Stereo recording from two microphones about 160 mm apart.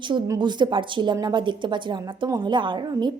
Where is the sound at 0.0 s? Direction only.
30° right (ahead or behind).